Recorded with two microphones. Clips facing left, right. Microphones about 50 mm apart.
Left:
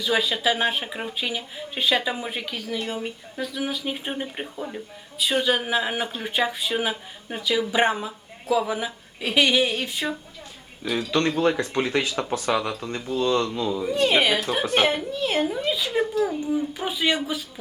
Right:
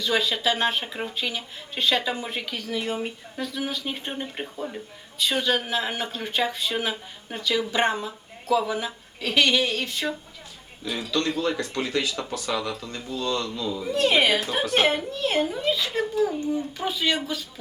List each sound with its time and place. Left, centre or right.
0.0 s speech: centre
2.7 s speech: centre
3.3 s speech: centre
10.8 s speech: left
13.8 s speech: centre